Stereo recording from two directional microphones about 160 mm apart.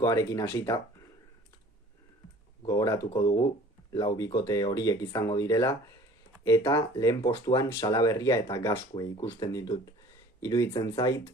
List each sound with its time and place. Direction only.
0.0 s speech: 20° left (ahead or behind)
2.6 s speech: 20° left (ahead or behind)